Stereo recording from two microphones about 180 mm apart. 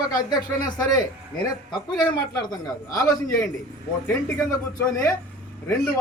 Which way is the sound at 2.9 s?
20° left (ahead or behind).